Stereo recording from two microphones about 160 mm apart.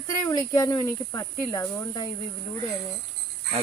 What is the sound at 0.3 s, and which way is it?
Speech, 25° left (ahead or behind).